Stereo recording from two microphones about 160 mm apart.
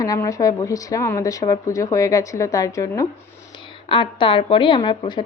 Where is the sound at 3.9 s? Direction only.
30° left (ahead or behind).